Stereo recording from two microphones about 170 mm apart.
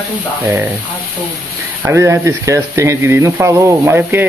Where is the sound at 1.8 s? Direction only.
15° right (ahead or behind).